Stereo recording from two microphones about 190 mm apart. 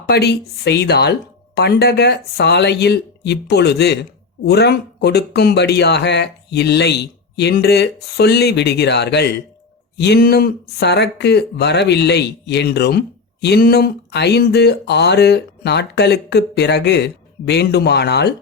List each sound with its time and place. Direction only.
0.0 s speech: 60° left (ahead or behind)